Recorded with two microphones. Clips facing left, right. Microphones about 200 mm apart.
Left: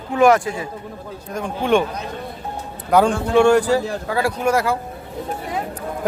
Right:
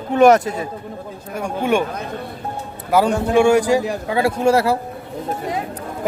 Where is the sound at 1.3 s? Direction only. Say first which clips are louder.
Left 1 dB; 10° right (ahead or behind).